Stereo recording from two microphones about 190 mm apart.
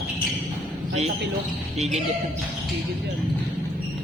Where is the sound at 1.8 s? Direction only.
35° right (ahead or behind).